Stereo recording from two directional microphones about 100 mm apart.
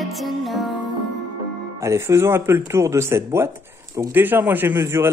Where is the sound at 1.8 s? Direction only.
30° right (ahead or behind).